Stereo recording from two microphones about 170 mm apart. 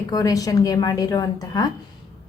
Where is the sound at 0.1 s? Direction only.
20° left (ahead or behind).